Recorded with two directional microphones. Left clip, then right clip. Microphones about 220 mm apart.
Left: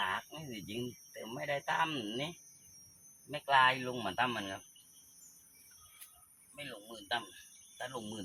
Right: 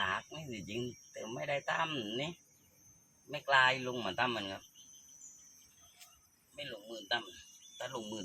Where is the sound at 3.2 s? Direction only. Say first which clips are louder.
Left 1 dB; 5° right (ahead or behind).